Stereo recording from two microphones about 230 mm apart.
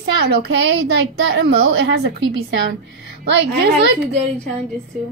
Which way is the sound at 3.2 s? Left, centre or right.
Right.